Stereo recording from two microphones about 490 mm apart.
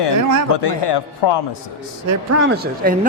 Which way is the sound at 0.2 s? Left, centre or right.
Right.